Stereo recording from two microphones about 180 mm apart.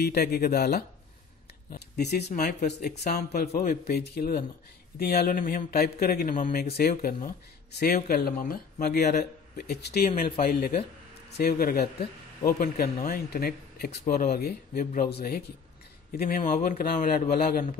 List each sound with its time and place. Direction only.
0.0 s speech: 60° left (ahead or behind)